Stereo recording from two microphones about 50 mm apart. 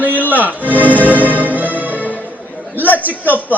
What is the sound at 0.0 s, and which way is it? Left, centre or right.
Music, left.